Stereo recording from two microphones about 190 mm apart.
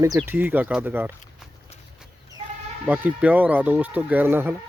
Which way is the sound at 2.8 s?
10° right (ahead or behind).